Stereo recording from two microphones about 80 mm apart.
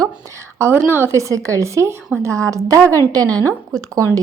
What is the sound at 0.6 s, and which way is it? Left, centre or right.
Speech, right.